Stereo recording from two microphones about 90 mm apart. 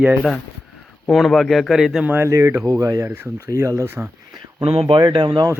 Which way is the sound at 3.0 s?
25° right (ahead or behind).